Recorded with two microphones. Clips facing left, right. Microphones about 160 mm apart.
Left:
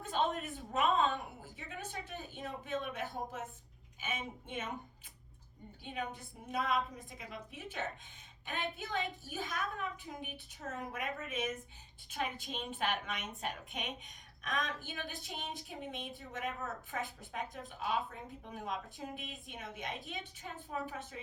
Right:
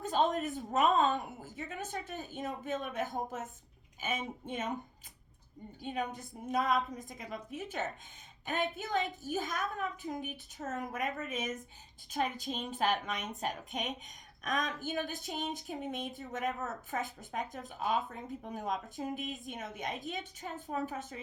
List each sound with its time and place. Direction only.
0.0 s a woman's voice: 40° right (ahead or behind)
5.8 s a woman's voice: 40° right (ahead or behind)